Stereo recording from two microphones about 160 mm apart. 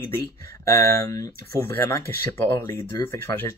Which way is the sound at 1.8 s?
15° left (ahead or behind).